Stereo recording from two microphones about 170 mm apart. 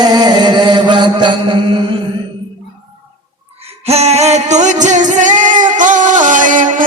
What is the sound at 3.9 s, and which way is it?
Music, 40° right (ahead or behind).